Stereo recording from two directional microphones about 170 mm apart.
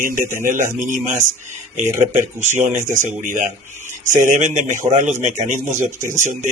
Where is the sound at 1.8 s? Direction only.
15° right (ahead or behind).